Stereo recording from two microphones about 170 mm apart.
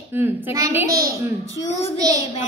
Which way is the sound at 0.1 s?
15° right (ahead or behind).